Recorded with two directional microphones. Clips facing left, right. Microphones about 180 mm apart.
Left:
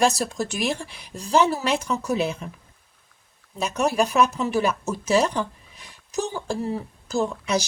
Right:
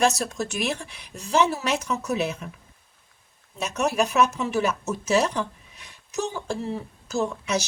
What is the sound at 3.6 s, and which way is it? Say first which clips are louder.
A woman's voice: left 2 dB; 35° left (ahead or behind).